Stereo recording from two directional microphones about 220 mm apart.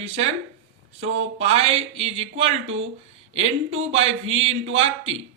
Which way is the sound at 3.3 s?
25° right (ahead or behind).